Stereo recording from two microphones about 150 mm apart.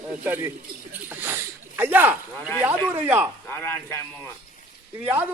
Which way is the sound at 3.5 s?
15° left (ahead or behind).